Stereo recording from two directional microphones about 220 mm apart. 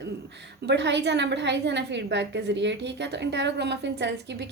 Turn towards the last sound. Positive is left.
turn(degrees=-50)  # may be behind; listen again after turning